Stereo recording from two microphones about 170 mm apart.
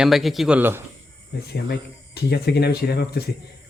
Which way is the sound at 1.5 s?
70° left (ahead or behind).